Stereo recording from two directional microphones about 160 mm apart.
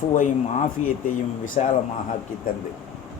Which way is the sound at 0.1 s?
50° left (ahead or behind).